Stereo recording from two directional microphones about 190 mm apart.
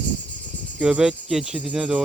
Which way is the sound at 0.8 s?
5° right (ahead or behind).